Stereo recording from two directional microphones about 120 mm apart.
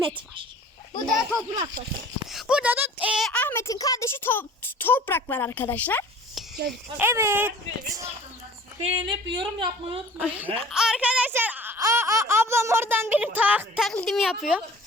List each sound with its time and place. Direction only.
1.0 s speech: centre (ahead or behind)
1.5 s speech: 35° right (ahead or behind)
2.3 s speech: 10° right (ahead or behind)
3.3 s speech: 20° left (ahead or behind)
6.9 s speech: 20° right (ahead or behind)
8.8 s speech: 45° right (ahead or behind)
10.2 s speech: 10° right (ahead or behind)
11.8 s speech: 25° right (ahead or behind)
13.7 s speech: 5° left (ahead or behind)